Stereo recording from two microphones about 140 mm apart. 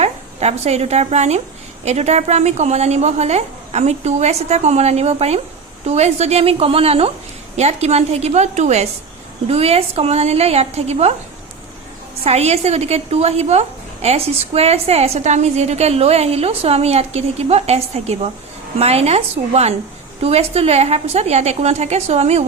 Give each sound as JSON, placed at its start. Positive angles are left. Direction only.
{"t": 0.0, "sound": "a woman's voice", "side_deg": -50}
{"t": 12.2, "sound": "a woman's voice", "side_deg": -50}